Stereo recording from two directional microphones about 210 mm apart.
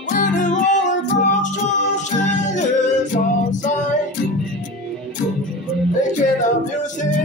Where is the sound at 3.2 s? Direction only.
40° left (ahead or behind).